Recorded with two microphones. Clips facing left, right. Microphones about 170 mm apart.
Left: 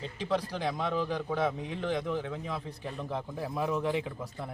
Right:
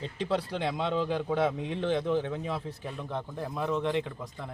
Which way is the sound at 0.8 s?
25° right (ahead or behind).